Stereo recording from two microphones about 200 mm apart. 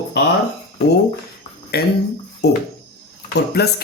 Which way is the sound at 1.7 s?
50° left (ahead or behind).